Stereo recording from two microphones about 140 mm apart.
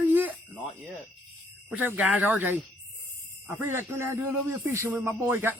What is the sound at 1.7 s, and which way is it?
Speech, 10° right (ahead or behind).